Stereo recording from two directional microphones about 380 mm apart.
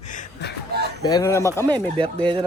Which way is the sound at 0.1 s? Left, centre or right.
Centre.